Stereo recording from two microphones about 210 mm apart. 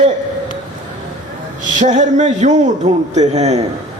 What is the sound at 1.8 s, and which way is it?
A man's voice, 35° right (ahead or behind).